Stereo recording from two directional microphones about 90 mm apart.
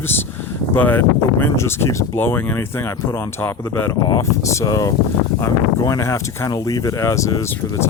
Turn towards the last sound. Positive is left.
turn(degrees=35)  # may be behind; listen again after turning